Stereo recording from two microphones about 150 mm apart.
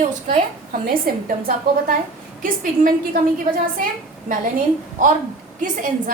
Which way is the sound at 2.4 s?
65° right (ahead or behind).